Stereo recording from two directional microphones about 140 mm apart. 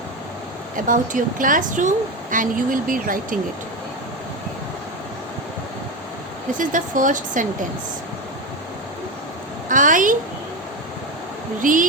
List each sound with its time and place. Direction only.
0.9 s speech: 75° right (ahead or behind)
6.6 s speech: 70° right (ahead or behind)
9.6 s speech: 70° right (ahead or behind)
11.6 s speech: 70° right (ahead or behind)